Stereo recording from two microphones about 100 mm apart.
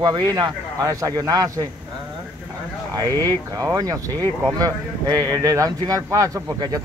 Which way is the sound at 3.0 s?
40° right (ahead or behind).